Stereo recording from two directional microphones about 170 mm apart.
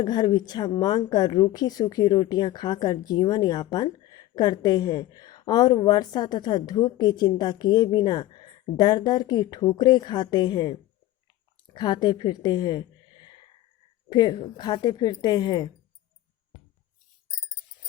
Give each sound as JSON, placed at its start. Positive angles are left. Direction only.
{"t": 0.0, "sound": "speech", "side_deg": 25}